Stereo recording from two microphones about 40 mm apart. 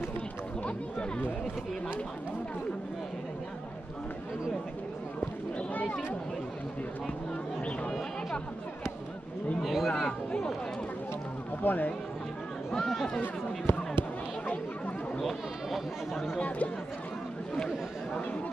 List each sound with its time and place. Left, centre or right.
9.6 s a sound: centre
10.0 s a sound: left
11.6 s speech: left
12.7 s speech: centre
13.2 s speech: left
15.1 s chatter: centre
16.3 s speech: left